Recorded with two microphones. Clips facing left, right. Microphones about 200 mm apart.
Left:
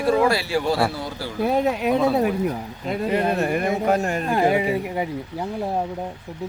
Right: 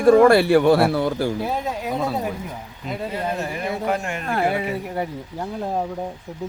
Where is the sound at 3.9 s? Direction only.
40° left (ahead or behind).